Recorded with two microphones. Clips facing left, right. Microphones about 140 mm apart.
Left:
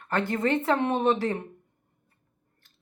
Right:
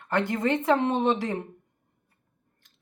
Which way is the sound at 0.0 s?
15° right (ahead or behind).